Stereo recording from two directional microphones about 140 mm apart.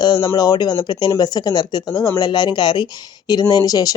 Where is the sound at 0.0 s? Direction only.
30° left (ahead or behind).